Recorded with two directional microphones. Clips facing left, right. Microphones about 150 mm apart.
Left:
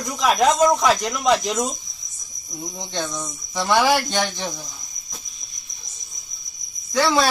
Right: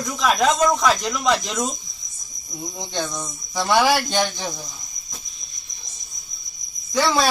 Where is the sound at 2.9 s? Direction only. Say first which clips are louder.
Even; 10° right (ahead or behind).